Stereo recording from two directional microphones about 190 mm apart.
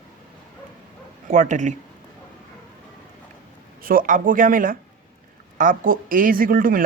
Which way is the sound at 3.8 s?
45° right (ahead or behind).